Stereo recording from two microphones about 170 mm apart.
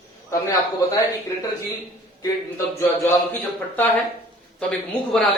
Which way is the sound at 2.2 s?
15° left (ahead or behind).